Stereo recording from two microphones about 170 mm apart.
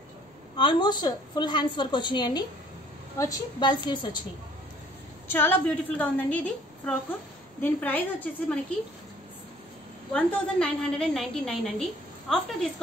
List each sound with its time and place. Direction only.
0.6 s a woman's voice: 25° left (ahead or behind)
5.3 s a woman's voice: 15° left (ahead or behind)
10.1 s a woman's voice: 5° left (ahead or behind)